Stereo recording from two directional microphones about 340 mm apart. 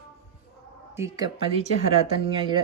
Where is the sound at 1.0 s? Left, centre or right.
Centre.